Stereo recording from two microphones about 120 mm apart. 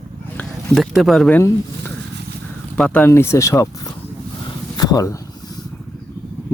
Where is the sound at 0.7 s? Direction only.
Centre (ahead or behind).